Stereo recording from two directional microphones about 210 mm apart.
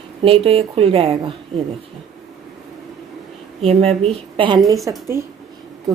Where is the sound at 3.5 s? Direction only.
30° right (ahead or behind).